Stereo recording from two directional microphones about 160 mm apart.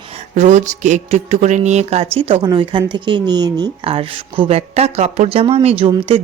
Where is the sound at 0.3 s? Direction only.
50° right (ahead or behind).